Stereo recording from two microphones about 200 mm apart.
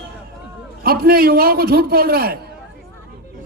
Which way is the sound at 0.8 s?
50° right (ahead or behind).